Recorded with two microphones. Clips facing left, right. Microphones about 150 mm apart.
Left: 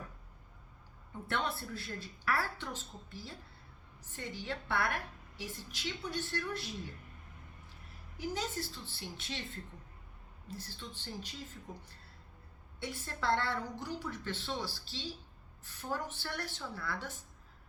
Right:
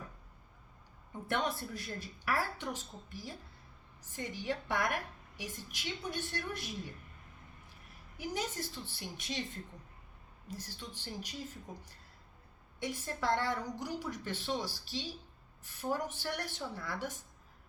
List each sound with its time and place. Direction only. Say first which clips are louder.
1.3 s a woman's voice: right 2 dB; 15° right (ahead or behind)
8.2 s a woman's voice: even; 15° right (ahead or behind)
10.5 s a woman's voice: right 1 dB; 15° right (ahead or behind)
12.8 s a woman's voice: right 1 dB; 15° right (ahead or behind)